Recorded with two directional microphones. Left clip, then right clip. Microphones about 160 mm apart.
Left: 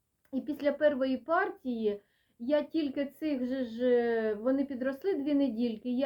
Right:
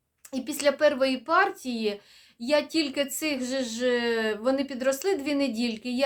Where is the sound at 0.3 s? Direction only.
15° right (ahead or behind).